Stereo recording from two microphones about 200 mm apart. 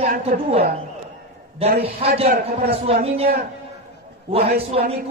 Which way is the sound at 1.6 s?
30° right (ahead or behind).